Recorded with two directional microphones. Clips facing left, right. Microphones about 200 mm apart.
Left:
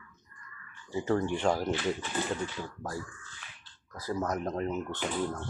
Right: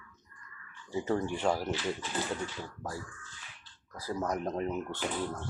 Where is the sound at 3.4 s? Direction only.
65° left (ahead or behind).